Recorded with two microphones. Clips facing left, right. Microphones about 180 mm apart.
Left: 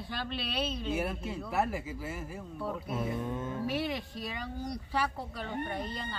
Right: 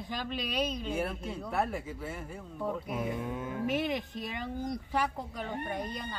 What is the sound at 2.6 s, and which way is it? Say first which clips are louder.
Speech: right 1 dB; 15° right (ahead or behind).